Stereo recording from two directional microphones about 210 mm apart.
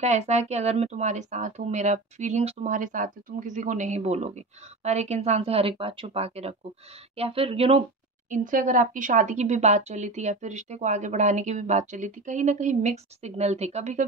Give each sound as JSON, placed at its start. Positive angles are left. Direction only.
{"t": 0.0, "sound": "speech", "side_deg": -35}
{"t": 8.3, "sound": "speech", "side_deg": -40}